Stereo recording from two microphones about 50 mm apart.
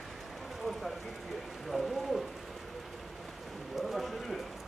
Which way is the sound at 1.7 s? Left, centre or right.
Centre.